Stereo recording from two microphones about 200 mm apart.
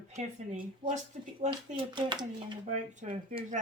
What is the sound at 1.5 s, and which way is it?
A child's voice, 25° right (ahead or behind).